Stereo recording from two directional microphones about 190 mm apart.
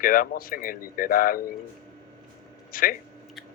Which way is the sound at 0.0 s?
50° left (ahead or behind).